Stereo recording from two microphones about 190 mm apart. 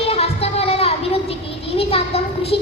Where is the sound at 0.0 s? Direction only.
30° left (ahead or behind).